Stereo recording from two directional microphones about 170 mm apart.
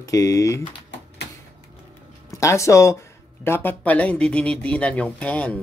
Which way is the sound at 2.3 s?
15° left (ahead or behind).